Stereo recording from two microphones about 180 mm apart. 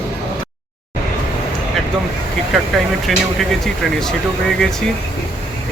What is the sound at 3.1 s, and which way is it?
Speech, centre (ahead or behind).